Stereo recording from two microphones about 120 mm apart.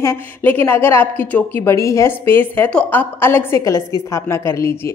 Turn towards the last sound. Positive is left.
turn(degrees=25)  # may be behind; listen again after turning